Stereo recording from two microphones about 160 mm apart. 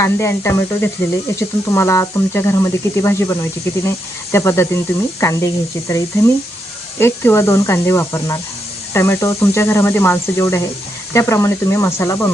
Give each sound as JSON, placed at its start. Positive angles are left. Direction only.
{"t": 0.0, "sound": "speech", "side_deg": 15}